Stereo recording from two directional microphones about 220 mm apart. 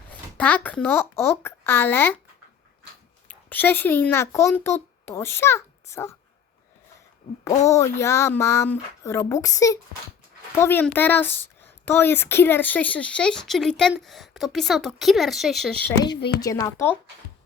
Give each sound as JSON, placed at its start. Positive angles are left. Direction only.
{"t": 0.3, "sound": "speech", "side_deg": 5}
{"t": 3.2, "sound": "a child's voice", "side_deg": 10}
{"t": 7.7, "sound": "speech", "side_deg": 10}
{"t": 16.4, "sound": "speech", "side_deg": 15}